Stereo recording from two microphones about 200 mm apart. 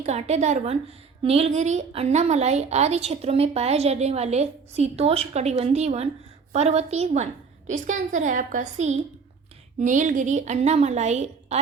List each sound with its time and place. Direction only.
0.0 s a woman's voice: 35° right (ahead or behind)